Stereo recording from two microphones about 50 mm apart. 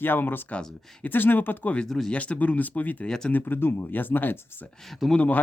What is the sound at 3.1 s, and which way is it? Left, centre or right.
Speech, centre.